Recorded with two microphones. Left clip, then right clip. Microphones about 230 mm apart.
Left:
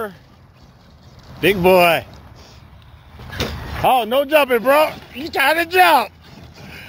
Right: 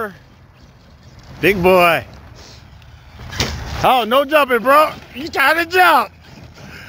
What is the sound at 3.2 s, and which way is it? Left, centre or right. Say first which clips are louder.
Vehicle: right 3 dB; right.